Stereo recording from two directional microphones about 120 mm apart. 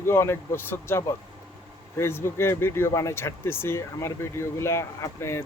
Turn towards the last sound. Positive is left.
turn(degrees=20)  # may be behind; listen again after turning